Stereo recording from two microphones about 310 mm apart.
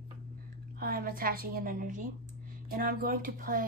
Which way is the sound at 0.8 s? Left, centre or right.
Right.